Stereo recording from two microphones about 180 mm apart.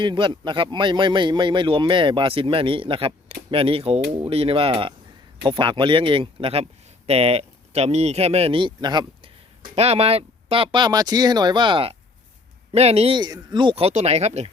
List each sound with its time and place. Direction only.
0.0 s speech: 25° right (ahead or behind)
9.7 s speech: 35° right (ahead or behind)